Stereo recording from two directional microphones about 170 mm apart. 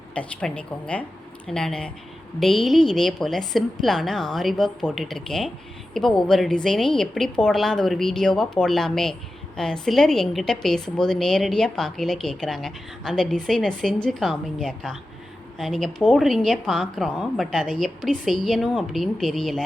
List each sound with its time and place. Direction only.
0.1 s a woman's voice: 5° left (ahead or behind)